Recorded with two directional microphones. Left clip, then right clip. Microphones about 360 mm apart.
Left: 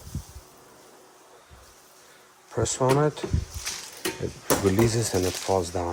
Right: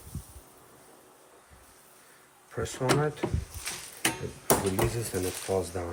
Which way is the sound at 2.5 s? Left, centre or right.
Centre.